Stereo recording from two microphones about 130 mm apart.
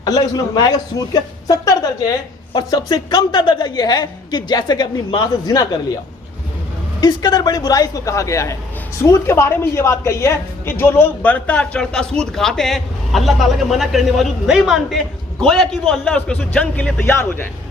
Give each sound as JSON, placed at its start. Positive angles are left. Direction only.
{"t": 0.0, "sound": "a man's voice", "side_deg": 30}
{"t": 7.0, "sound": "a man's voice", "side_deg": 30}